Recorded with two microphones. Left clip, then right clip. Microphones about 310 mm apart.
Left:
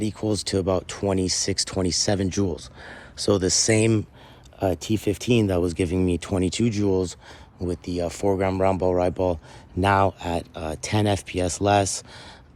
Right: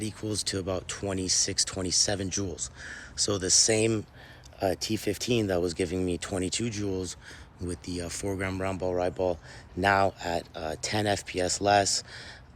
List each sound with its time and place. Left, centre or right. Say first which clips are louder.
0.0 s speech: left 7 dB; centre